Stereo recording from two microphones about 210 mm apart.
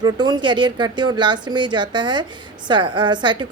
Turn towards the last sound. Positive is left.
turn(degrees=-20)  # may be behind; listen again after turning